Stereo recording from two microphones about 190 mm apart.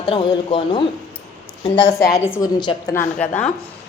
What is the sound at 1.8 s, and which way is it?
A woman's voice, 15° left (ahead or behind).